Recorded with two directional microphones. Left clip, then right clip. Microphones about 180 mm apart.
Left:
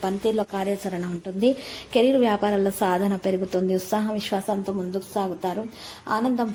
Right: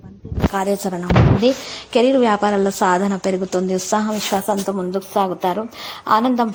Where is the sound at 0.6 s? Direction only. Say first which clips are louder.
Right 6 dB; 20° right (ahead or behind).